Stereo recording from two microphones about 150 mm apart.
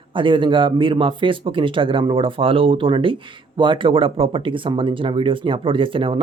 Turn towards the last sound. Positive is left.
turn(degrees=-35)  # may be behind; listen again after turning